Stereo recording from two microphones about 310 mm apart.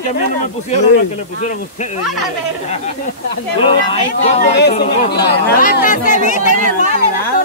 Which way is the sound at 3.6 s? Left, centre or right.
Centre.